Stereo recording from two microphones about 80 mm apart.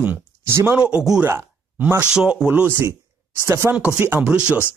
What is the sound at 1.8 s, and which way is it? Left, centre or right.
Speech, right.